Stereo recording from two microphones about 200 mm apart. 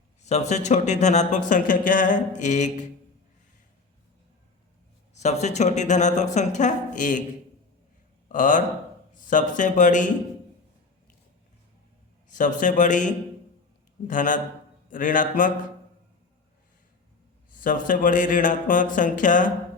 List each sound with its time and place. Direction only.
0.2 s speech: 35° left (ahead or behind)
5.2 s speech: 35° left (ahead or behind)
8.3 s speech: 40° left (ahead or behind)
12.3 s speech: 40° left (ahead or behind)
17.5 s speech: 40° left (ahead or behind)